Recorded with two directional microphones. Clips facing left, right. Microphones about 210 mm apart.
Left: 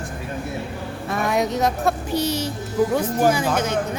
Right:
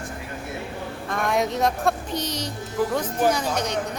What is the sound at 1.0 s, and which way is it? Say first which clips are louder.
Speech: left 2 dB; 5° left (ahead or behind).